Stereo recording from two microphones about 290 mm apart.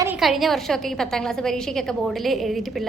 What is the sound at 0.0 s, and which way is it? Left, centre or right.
A woman's voice, centre.